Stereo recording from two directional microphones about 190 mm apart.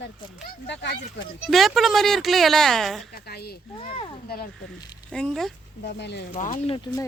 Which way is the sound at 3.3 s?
55° left (ahead or behind).